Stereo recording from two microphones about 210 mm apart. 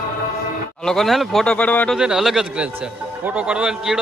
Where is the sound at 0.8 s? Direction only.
Centre (ahead or behind).